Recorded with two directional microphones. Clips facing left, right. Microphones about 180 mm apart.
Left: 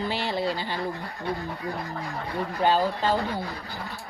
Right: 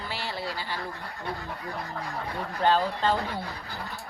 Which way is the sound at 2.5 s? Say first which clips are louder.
Left 1 dB; 15° left (ahead or behind).